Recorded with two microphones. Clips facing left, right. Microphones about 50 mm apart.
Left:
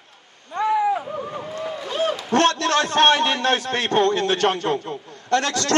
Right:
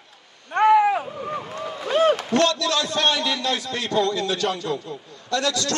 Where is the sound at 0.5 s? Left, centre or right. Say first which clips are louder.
Right 4 dB; right.